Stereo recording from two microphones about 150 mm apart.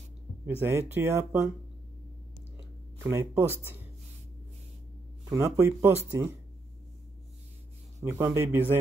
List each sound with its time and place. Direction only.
0.5 s speech: 15° right (ahead or behind)
3.0 s speech: 15° right (ahead or behind)
5.3 s speech: 15° right (ahead or behind)
8.0 s speech: 15° right (ahead or behind)